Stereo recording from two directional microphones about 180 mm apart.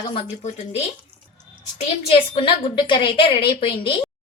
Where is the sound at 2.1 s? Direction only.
30° left (ahead or behind).